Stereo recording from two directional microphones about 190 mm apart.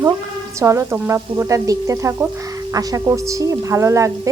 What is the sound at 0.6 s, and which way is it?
Speech, 15° right (ahead or behind).